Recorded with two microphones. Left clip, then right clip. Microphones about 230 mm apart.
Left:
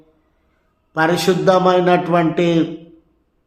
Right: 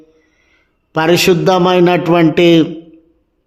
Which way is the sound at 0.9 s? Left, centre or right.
Right.